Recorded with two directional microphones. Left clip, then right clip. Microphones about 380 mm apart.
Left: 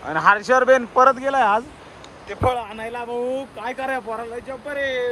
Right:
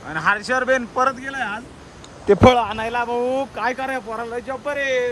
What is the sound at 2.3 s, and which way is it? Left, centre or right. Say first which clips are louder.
Speech: right 9 dB; right.